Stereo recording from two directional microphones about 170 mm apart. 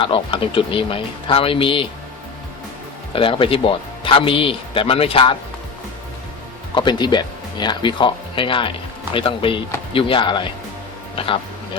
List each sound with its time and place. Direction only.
0.0 s speech: 30° left (ahead or behind)
3.1 s speech: 30° left (ahead or behind)
6.7 s speech: 25° left (ahead or behind)